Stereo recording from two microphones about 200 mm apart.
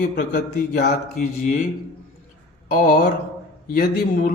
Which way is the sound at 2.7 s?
50° left (ahead or behind).